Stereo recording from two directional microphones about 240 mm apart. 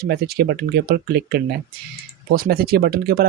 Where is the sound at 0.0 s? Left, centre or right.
Right.